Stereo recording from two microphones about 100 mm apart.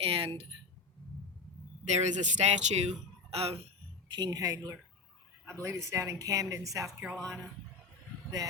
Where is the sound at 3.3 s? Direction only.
90° right.